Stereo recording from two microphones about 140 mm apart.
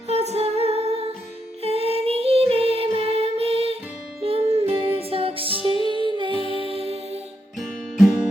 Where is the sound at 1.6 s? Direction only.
45° right (ahead or behind).